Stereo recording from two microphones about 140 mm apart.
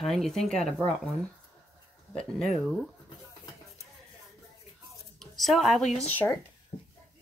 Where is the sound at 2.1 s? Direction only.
5° left (ahead or behind).